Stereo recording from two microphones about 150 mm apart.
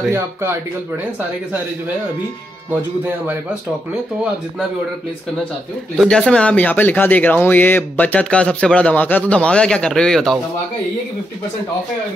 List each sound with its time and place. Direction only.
0.1 s speech: 15° right (ahead or behind)
5.9 s speech: 5° left (ahead or behind)